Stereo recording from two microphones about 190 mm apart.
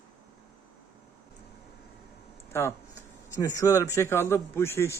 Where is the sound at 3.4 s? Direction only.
15° left (ahead or behind).